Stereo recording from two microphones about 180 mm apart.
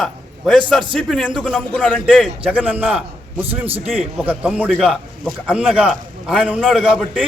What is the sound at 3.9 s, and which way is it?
A man's voice, centre (ahead or behind).